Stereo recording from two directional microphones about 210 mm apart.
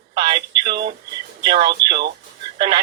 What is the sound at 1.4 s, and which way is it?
Speech, 25° right (ahead or behind).